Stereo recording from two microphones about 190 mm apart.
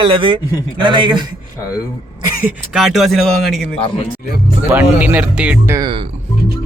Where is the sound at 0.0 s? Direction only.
25° right (ahead or behind).